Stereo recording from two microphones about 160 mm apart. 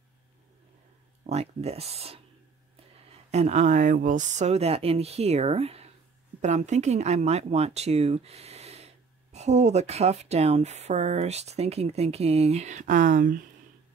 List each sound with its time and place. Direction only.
1.2 s speech: 45° right (ahead or behind)
3.3 s speech: 45° right (ahead or behind)